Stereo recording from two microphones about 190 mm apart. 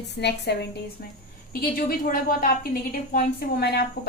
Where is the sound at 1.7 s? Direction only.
50° left (ahead or behind).